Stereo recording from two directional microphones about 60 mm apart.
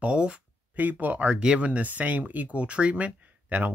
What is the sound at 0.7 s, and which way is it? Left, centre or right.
Speech, right.